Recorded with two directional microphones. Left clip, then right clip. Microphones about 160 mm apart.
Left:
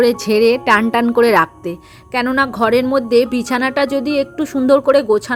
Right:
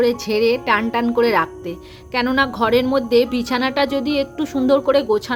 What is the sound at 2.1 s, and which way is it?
A woman's voice, 35° left (ahead or behind).